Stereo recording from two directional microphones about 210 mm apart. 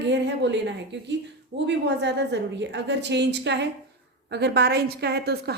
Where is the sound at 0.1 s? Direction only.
55° right (ahead or behind).